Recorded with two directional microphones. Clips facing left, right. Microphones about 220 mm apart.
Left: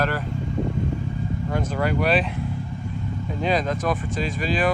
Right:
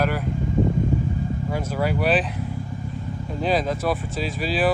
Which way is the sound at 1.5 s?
5° right (ahead or behind).